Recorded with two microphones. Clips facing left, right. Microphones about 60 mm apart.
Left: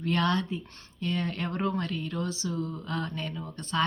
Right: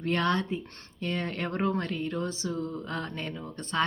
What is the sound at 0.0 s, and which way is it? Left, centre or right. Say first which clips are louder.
Speech: even; right.